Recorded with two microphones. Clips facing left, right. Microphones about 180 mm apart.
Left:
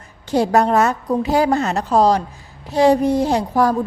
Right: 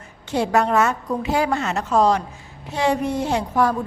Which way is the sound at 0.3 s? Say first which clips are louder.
Left 4 dB; 35° left (ahead or behind).